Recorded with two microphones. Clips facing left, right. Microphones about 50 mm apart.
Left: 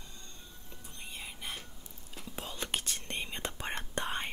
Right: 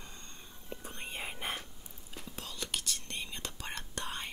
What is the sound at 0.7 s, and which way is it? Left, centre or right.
Whispering, right.